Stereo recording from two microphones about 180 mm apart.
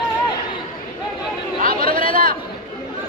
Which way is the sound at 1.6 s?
50° right (ahead or behind).